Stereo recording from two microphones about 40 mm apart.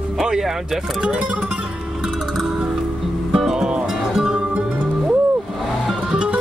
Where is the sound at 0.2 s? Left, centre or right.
Centre.